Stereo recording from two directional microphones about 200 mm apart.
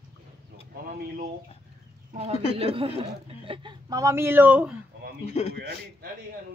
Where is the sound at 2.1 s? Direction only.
30° right (ahead or behind); by 4.7 s 10° right (ahead or behind).